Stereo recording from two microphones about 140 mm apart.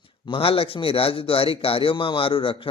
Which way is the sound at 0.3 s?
40° left (ahead or behind).